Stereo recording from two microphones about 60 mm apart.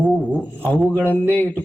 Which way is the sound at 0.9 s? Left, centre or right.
Left.